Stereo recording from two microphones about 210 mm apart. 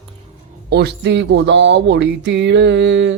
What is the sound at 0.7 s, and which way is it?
Music, 50° right (ahead or behind).